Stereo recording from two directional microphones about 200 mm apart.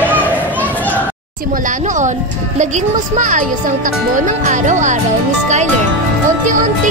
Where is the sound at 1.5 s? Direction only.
40° right (ahead or behind).